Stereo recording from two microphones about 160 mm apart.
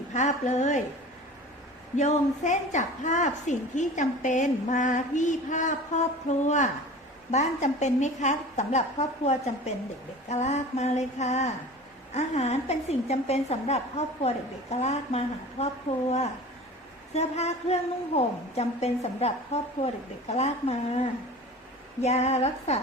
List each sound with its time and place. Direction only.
0.1 s a woman's voice: 50° left (ahead or behind)
2.0 s a woman's voice: 50° left (ahead or behind)
22.0 s a woman's voice: 40° left (ahead or behind)